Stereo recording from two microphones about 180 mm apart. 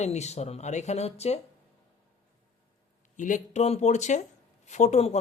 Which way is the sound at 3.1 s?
45° left (ahead or behind).